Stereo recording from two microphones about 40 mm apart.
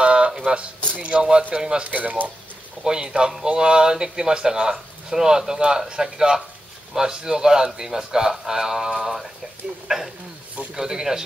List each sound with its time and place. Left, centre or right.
0.0 s a sound: right
0.9 s speech: right
1.9 s speech: right
2.8 s speech: centre